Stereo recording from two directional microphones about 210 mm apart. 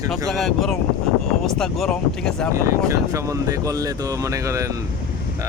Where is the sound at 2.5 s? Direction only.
15° right (ahead or behind).